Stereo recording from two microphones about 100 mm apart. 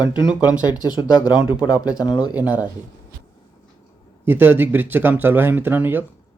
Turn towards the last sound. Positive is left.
turn(degrees=-20)  # may be behind; listen again after turning